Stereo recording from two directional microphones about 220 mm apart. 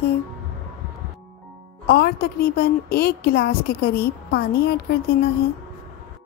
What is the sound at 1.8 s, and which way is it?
A woman's voice, 45° left (ahead or behind).